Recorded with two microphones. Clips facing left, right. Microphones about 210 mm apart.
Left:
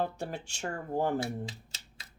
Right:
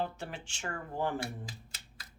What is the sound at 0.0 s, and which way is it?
Speech, 40° left (ahead or behind).